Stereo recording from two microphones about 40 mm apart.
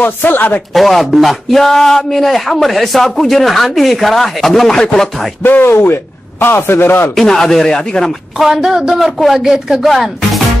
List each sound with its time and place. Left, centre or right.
0.0 s speech: left
0.7 s speech: centre
5.4 s a man's voice: left
7.2 s speech: centre
8.4 s speech: centre